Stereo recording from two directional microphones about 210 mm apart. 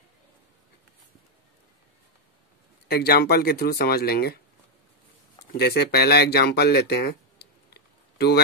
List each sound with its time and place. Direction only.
2.9 s speech: 45° left (ahead or behind)
5.5 s speech: 50° left (ahead or behind)